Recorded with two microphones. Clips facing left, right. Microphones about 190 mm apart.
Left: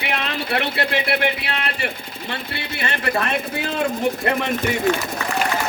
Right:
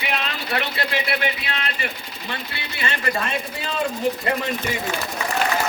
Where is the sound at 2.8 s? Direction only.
65° left (ahead or behind).